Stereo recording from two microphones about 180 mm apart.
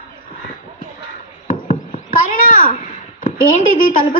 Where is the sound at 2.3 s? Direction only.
50° left (ahead or behind).